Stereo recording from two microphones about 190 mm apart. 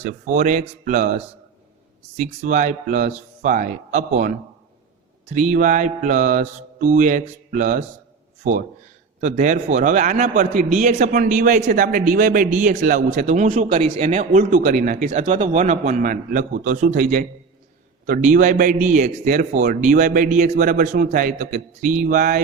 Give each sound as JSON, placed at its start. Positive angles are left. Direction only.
{"t": 0.0, "sound": "a man's voice", "side_deg": -40}
{"t": 9.2, "sound": "a man's voice", "side_deg": -40}